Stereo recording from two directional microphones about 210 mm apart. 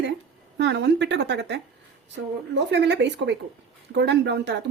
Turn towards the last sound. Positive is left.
turn(degrees=-55)  # may be behind; listen again after turning